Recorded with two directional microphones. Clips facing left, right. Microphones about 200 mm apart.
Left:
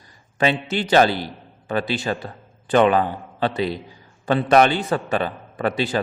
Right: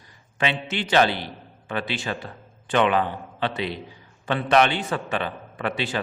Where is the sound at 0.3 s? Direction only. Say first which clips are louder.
Left 5 dB; 40° left (ahead or behind).